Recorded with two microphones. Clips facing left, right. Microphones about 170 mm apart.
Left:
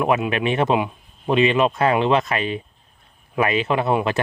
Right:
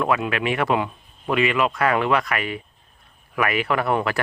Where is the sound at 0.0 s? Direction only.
20° left (ahead or behind).